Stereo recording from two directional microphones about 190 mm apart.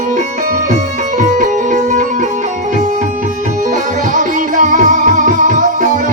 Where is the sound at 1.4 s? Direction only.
40° right (ahead or behind).